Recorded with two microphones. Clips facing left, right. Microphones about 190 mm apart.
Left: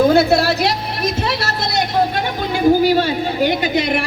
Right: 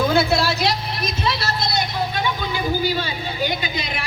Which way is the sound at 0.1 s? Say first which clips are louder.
Left 6 dB; 40° left (ahead or behind).